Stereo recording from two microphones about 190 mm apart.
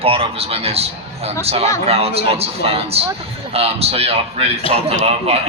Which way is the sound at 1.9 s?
30° right (ahead or behind).